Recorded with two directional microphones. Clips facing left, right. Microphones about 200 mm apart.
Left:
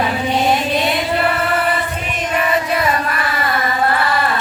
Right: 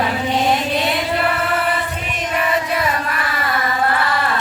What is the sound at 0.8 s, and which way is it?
Chant, 20° left (ahead or behind).